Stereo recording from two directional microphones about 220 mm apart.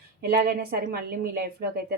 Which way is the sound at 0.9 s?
40° right (ahead or behind).